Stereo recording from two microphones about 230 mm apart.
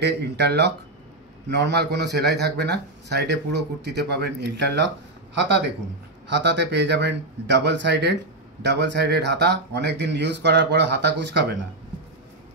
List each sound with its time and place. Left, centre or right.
0.0 s a man's voice: right
6.2 s a man's voice: right